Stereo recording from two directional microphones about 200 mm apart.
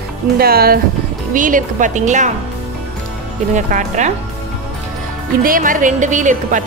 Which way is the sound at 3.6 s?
40° right (ahead or behind).